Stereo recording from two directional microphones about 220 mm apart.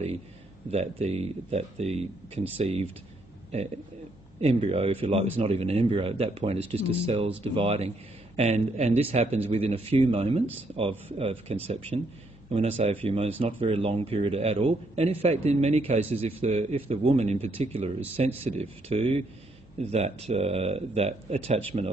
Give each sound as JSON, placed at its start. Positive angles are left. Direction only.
{"t": 0.7, "sound": "speech", "side_deg": -30}
{"t": 4.4, "sound": "speech", "side_deg": -30}